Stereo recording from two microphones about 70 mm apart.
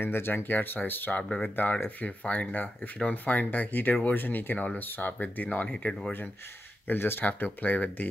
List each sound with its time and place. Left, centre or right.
0.0 s speech: left
6.9 s speech: left